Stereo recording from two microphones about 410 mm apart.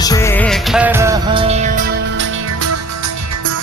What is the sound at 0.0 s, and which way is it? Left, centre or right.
Music, centre.